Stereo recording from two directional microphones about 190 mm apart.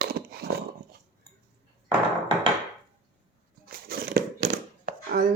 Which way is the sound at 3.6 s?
50° right (ahead or behind).